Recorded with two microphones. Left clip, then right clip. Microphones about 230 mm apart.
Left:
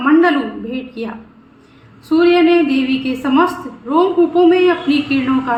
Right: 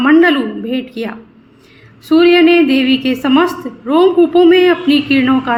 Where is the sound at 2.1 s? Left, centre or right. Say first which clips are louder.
Right 3 dB; right.